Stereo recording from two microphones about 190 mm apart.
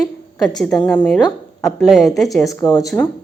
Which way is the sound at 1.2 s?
20° left (ahead or behind).